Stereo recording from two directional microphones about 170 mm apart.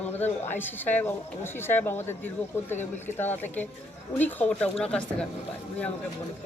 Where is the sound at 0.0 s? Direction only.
10° left (ahead or behind).